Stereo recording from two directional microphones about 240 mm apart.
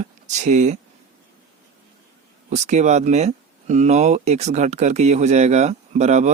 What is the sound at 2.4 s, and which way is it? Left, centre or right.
Speech, right.